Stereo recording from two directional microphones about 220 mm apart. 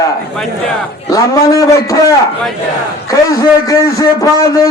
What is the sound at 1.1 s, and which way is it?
A man's voice, 15° left (ahead or behind).